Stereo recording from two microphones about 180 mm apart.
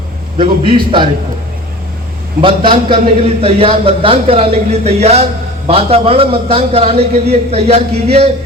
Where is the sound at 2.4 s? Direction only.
30° right (ahead or behind).